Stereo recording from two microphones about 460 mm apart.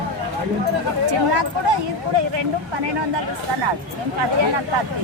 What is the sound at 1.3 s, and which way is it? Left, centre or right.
Speech, right.